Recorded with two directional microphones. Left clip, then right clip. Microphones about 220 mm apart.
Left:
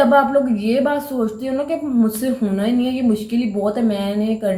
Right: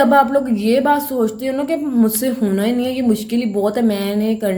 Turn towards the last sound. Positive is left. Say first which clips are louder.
# right 1 dB
turn(degrees=-35)  # may be behind; listen again after turning